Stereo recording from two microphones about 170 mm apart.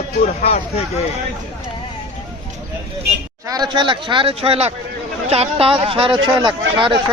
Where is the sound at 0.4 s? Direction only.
35° left (ahead or behind).